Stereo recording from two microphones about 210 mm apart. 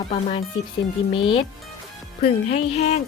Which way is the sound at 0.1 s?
30° left (ahead or behind).